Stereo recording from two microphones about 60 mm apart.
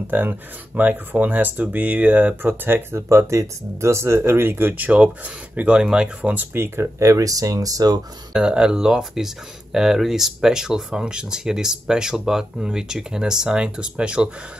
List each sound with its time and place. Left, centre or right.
0.1 s speech: right
6.3 s speech: right
7.0 s speech: right
8.3 s speech: centre